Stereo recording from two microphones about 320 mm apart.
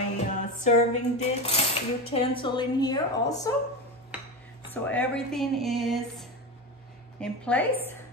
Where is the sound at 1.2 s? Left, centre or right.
Centre.